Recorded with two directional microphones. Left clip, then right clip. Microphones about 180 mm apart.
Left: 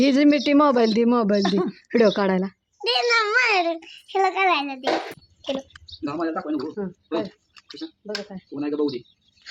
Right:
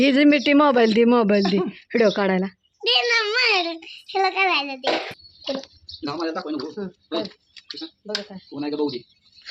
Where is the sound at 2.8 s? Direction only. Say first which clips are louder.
Right 1 dB; 15° left (ahead or behind).